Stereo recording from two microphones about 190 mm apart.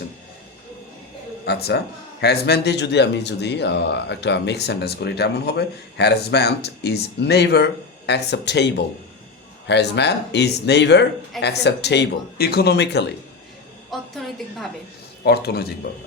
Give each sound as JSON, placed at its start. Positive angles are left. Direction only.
{"t": 1.5, "sound": "speech", "side_deg": 60}
{"t": 14.1, "sound": "a sound", "side_deg": 0}
{"t": 15.2, "sound": "speech", "side_deg": 55}